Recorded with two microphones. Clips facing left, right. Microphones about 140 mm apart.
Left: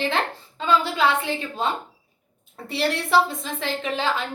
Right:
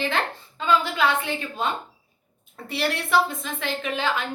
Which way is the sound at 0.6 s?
30° left (ahead or behind).